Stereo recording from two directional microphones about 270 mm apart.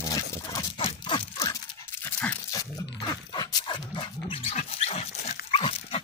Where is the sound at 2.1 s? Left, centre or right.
Centre.